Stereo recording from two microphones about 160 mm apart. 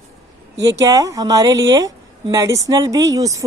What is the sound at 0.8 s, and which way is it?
A woman's voice, 20° right (ahead or behind).